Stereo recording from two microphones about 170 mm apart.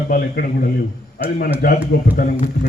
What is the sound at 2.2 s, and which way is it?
Speech, 50° left (ahead or behind).